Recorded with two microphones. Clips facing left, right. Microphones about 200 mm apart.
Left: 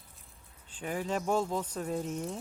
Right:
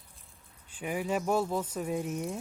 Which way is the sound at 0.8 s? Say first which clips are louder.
Right 2 dB; 10° right (ahead or behind).